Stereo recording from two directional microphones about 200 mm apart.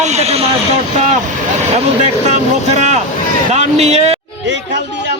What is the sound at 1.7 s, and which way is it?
Speech, 35° right (ahead or behind).